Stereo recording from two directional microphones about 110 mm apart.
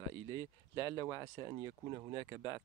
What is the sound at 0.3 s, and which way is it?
Speech, 40° left (ahead or behind).